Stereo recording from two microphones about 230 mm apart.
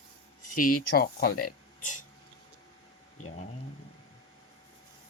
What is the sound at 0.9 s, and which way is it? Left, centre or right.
Speech, left.